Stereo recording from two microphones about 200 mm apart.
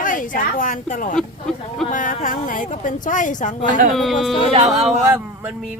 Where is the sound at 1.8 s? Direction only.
40° left (ahead or behind).